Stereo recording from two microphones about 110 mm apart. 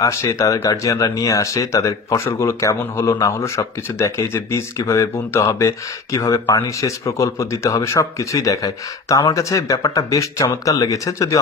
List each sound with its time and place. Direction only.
0.0 s speech: 30° left (ahead or behind)